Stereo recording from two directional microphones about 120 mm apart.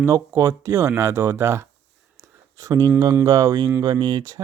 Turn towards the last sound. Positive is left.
turn(degrees=-35)  # may be behind; listen again after turning